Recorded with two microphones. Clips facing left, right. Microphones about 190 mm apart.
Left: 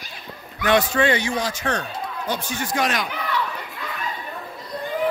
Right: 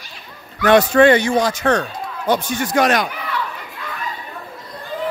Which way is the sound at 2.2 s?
70° right (ahead or behind).